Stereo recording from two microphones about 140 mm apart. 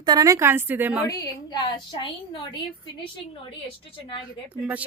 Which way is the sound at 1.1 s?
25° left (ahead or behind).